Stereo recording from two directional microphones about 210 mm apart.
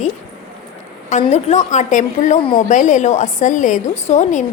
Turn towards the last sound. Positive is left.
turn(degrees=35)  # may be behind; listen again after turning